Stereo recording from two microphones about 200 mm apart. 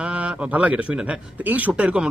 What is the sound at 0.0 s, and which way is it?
A man's voice, 5° right (ahead or behind).